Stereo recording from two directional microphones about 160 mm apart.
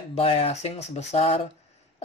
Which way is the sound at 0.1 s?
40° left (ahead or behind).